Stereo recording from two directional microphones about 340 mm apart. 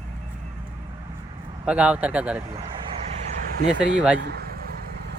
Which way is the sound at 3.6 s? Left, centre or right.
Right.